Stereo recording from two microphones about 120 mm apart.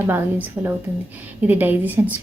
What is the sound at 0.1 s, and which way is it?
A woman's voice, 15° right (ahead or behind).